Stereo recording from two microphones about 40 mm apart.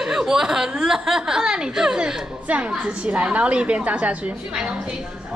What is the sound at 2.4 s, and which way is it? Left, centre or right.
A woman's voice, right.